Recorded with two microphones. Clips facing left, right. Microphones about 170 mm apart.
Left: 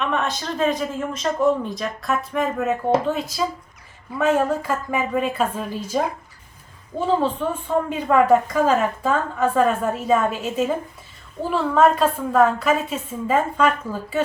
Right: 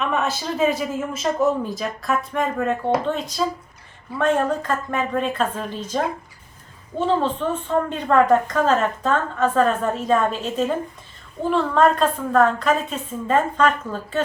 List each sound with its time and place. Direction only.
0.0 s a man's voice: 5° right (ahead or behind)